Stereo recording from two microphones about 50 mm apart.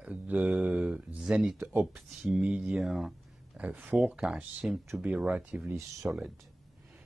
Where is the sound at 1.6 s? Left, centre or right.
Right.